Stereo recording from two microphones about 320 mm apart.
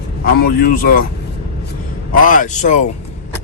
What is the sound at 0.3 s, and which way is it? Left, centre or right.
Speech, left.